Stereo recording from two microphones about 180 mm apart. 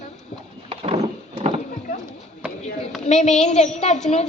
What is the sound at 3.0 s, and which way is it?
Speech, 40° left (ahead or behind).